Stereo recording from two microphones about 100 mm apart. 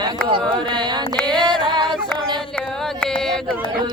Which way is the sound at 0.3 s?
55° right (ahead or behind).